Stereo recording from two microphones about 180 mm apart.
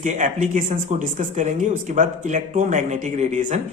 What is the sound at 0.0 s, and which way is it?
Speech, 45° right (ahead or behind).